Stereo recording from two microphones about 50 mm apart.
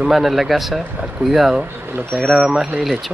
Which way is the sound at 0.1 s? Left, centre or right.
Centre.